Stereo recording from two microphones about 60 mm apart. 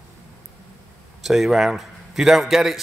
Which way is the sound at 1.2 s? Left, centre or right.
Centre.